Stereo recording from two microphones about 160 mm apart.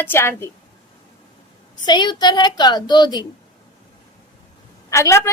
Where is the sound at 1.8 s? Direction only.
25° left (ahead or behind).